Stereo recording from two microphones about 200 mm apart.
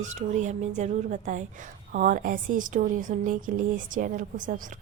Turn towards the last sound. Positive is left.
turn(degrees=-40)  # may be behind; listen again after turning